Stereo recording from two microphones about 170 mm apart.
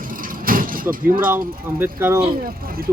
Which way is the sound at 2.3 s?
60° right (ahead or behind).